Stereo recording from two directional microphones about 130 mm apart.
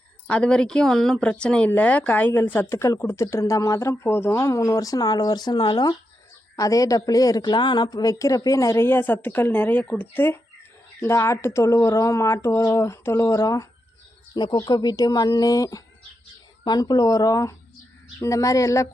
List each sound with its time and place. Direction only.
0.3 s speech: 10° left (ahead or behind); by 18.9 s 25° left (ahead or behind)